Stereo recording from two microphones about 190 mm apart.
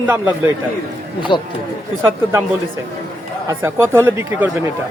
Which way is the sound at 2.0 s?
15° right (ahead or behind).